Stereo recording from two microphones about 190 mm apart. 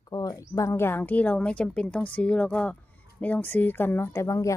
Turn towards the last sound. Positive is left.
turn(degrees=15)  # may be behind; listen again after turning